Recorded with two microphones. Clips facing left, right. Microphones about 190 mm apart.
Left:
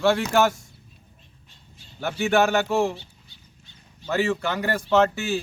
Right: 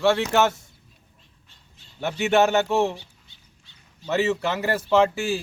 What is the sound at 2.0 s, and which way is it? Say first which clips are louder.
Speech: right 1 dB; centre (ahead or behind).